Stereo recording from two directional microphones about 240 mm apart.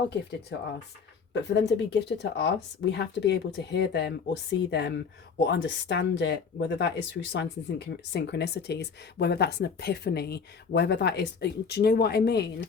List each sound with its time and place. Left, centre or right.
0.5 s speech: left